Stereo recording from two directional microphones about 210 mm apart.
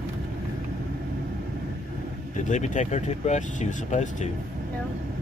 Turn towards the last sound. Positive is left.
turn(degrees=35)  # may be behind; listen again after turning